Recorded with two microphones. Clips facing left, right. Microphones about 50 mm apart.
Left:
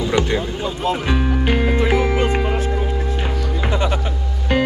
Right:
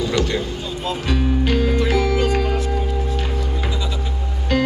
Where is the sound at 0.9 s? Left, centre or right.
Left.